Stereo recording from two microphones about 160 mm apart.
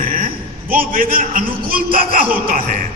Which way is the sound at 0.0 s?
60° right (ahead or behind).